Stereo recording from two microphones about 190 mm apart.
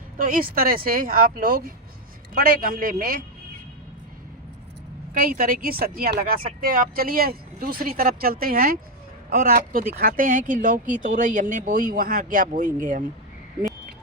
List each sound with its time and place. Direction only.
0.2 s speech: 50° right (ahead or behind)
5.1 s speech: 50° right (ahead or behind)